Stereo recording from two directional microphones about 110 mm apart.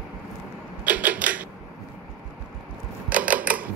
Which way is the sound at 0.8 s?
15° right (ahead or behind).